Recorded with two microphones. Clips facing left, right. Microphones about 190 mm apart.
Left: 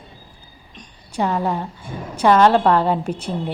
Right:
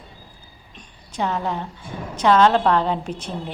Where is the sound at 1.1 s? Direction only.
10° left (ahead or behind).